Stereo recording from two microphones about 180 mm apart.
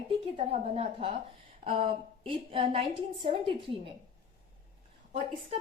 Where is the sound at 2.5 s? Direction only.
30° right (ahead or behind).